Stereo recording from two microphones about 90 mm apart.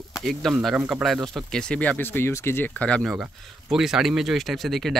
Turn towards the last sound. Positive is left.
turn(degrees=0)  # may be behind; listen again after turning